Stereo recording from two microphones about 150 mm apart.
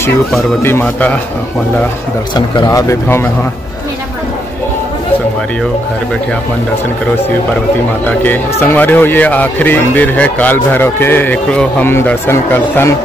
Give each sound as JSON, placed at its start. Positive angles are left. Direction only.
{"t": 0.6, "sound": "speech", "side_deg": 15}
{"t": 2.3, "sound": "speech", "side_deg": 25}
{"t": 8.2, "sound": "speech", "side_deg": 10}